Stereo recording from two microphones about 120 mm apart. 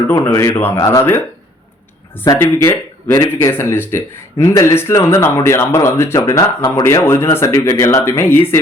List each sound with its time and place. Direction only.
0.3 s speech: 20° left (ahead or behind)
2.2 s speech: 25° left (ahead or behind)